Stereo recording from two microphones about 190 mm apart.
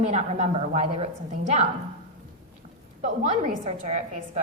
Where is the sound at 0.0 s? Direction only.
35° right (ahead or behind).